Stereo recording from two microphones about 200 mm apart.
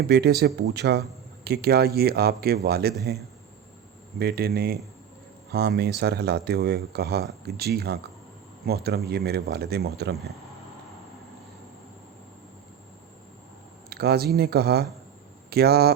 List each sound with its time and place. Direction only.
0.0 s speech: 55° right (ahead or behind)
4.2 s speech: 50° right (ahead or behind)
13.9 s speech: 50° right (ahead or behind)